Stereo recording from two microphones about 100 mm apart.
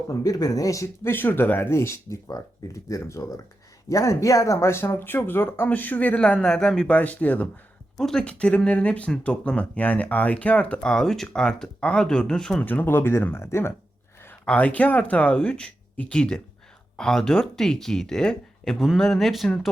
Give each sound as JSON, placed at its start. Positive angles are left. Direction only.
{"t": 0.1, "sound": "speech", "side_deg": 35}
{"t": 1.1, "sound": "speech", "side_deg": 20}
{"t": 12.6, "sound": "speech", "side_deg": 20}
{"t": 14.4, "sound": "speech", "side_deg": 10}